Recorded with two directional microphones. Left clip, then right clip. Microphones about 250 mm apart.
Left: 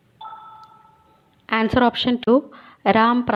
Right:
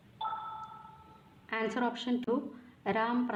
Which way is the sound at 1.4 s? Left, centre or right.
Left.